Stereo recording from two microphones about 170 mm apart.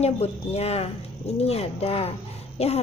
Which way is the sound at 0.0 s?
35° left (ahead or behind).